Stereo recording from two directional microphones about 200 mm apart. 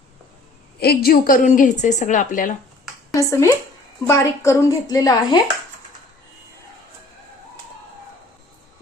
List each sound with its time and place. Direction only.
0.8 s a woman's voice: 50° left (ahead or behind)
3.1 s a woman's voice: 15° left (ahead or behind)